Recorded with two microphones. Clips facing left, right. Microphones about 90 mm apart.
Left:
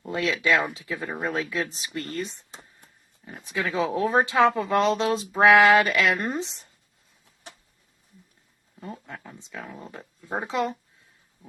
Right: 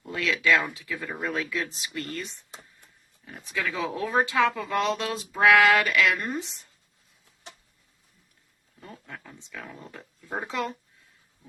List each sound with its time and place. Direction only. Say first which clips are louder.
0.1 s speech: left 1 dB; 20° left (ahead or behind)
3.5 s speech: left 4 dB; 25° left (ahead or behind)
8.8 s speech: left 5 dB; 25° left (ahead or behind)